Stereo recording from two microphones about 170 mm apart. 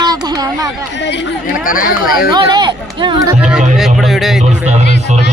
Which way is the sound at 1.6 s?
55° left (ahead or behind).